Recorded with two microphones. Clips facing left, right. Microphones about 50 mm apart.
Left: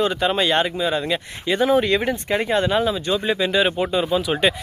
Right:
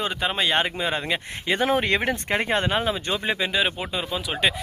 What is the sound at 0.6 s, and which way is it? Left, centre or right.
Speech, right.